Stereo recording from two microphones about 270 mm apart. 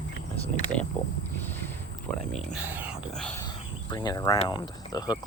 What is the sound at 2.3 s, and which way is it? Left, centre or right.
Speech, centre.